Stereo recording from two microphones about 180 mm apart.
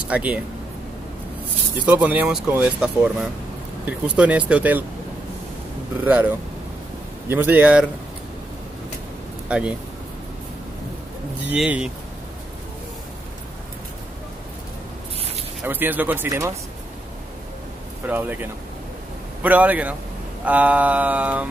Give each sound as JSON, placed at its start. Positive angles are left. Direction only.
{"t": 0.1, "sound": "speech", "side_deg": -10}
{"t": 1.9, "sound": "speech", "side_deg": -10}
{"t": 6.0, "sound": "speech", "side_deg": -10}
{"t": 9.5, "sound": "speech", "side_deg": -5}
{"t": 11.4, "sound": "speech", "side_deg": -5}
{"t": 15.6, "sound": "speech", "side_deg": -10}
{"t": 18.0, "sound": "speech", "side_deg": -10}